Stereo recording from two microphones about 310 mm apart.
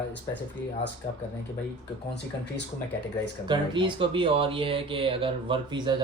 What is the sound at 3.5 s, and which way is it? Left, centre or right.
Speech, centre.